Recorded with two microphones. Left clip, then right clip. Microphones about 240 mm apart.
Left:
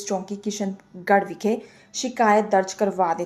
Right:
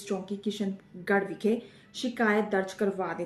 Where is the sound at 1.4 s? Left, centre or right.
Left.